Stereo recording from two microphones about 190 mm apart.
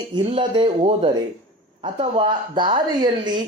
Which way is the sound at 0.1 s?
30° right (ahead or behind).